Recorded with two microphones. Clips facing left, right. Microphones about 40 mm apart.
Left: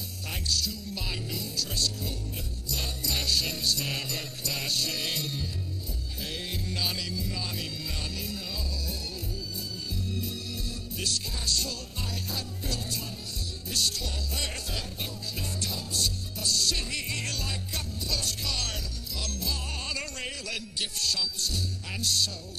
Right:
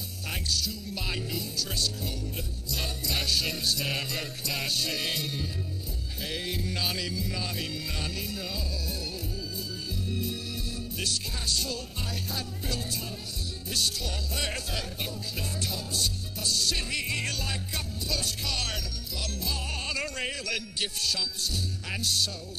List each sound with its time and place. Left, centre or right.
0.3 s music: centre
10.1 s organ: centre
11.0 s music: centre
15.9 s music: centre